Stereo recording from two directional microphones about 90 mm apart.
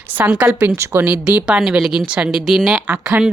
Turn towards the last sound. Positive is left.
turn(degrees=-15)  # may be behind; listen again after turning